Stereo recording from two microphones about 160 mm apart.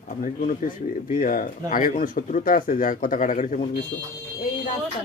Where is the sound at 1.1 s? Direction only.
60° left (ahead or behind).